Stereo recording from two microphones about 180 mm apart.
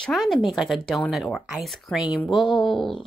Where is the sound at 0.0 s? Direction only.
Centre (ahead or behind).